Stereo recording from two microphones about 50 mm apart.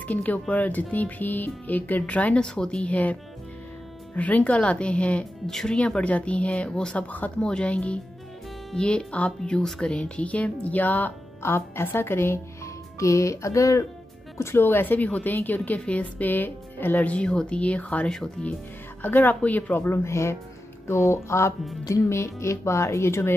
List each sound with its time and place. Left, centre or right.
0.0 s speech: left
2.4 s speech: centre
2.9 s speech: left
6.7 s speech: centre
7.0 s speech: left
7.3 s speech: left
9.8 s speech: left
11.4 s a woman's voice: left
13.0 s speech: left
14.6 s speech: left
17.0 s speech: left
18.0 s speech: centre
19.0 s speech: left
19.8 s speech: left